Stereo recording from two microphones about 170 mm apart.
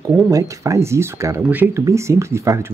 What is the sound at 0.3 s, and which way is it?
Speech, 20° right (ahead or behind).